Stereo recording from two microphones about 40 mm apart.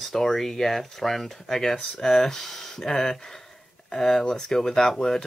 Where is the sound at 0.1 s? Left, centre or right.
Centre.